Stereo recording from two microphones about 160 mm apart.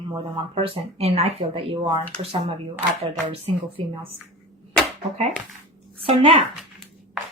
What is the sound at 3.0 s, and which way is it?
Speech, 35° right (ahead or behind).